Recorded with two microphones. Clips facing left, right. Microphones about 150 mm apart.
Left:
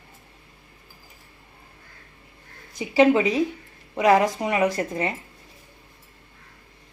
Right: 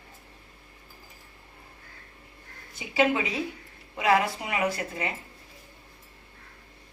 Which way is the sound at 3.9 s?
40° left (ahead or behind).